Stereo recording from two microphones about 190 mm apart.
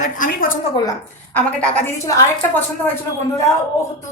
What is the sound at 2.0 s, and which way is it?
Speech, 15° left (ahead or behind).